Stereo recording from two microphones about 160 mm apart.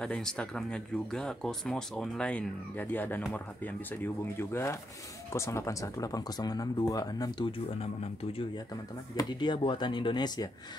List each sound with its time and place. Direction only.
0.0 s speech: 5° left (ahead or behind); by 10.5 s 25° left (ahead or behind)